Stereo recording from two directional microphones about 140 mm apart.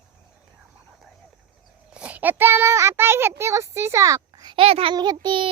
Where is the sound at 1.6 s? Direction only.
5° right (ahead or behind); by 4.9 s 45° right (ahead or behind).